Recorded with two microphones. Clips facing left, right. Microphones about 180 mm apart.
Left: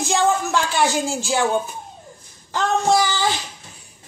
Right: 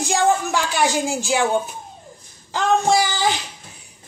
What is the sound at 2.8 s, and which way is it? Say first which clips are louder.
Speech: even; 15° right (ahead or behind).